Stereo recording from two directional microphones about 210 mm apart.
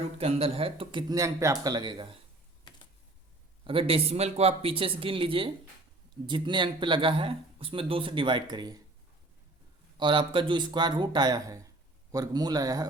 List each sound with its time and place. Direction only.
0.2 s speech: 25° right (ahead or behind)
3.6 s speech: 25° right (ahead or behind)
10.0 s speech: 25° right (ahead or behind)